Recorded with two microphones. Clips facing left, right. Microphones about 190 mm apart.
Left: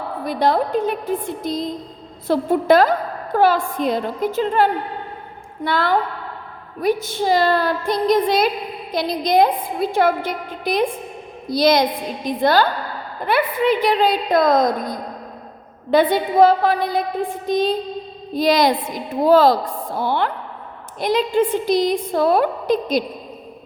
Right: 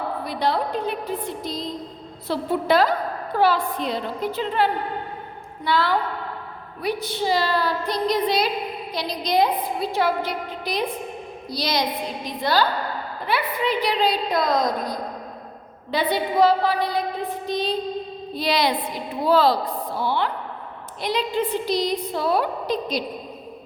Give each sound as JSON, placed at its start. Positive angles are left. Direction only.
{"t": 0.3, "sound": "a woman's voice", "side_deg": 45}